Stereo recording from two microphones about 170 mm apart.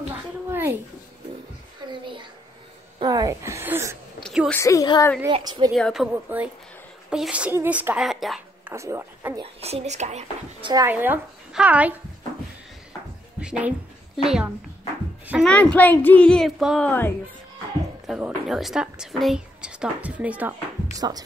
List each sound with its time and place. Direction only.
0.1 s a sound: 10° right (ahead or behind)
1.9 s a sound: 30° right (ahead or behind)
4.2 s a sound: centre (ahead or behind)
4.6 s a woman's voice: 20° left (ahead or behind)
5.3 s speech: 25° right (ahead or behind)
5.7 s speech: centre (ahead or behind)
6.3 s a woman's voice: 10° right (ahead or behind)
8.7 s speech: 15° right (ahead or behind)
9.4 s speech: 35° right (ahead or behind)
10.6 s a woman's voice: 20° right (ahead or behind)
10.9 s speech: 10° right (ahead or behind)
13.4 s a woman's voice: 5° right (ahead or behind); by 17.1 s 10° left (ahead or behind)
18.0 s a woman's voice: 5° right (ahead or behind)